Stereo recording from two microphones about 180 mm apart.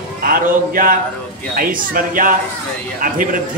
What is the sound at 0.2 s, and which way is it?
Speech, 55° right (ahead or behind).